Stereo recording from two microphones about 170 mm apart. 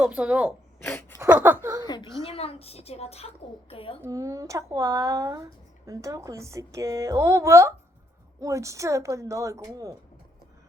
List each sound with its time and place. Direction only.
0.0 s speech: 5° right (ahead or behind)
0.8 s wail: 10° left (ahead or behind)
1.2 s speech: 10° right (ahead or behind)
2.2 s a woman's voice: 35° left (ahead or behind)
4.0 s speech: 20° right (ahead or behind)